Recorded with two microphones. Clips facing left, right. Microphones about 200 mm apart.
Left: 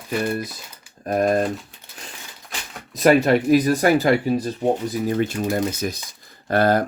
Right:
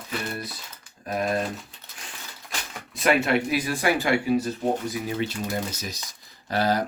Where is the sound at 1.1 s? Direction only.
45° left (ahead or behind).